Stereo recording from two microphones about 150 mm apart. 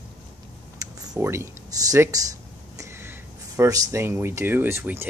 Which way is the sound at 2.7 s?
15° right (ahead or behind).